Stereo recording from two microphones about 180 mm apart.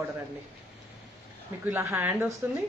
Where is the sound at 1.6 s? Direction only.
15° right (ahead or behind).